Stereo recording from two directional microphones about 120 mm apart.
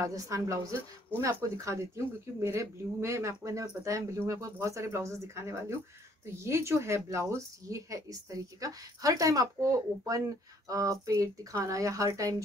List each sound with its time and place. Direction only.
0.0 s speech: 25° right (ahead or behind)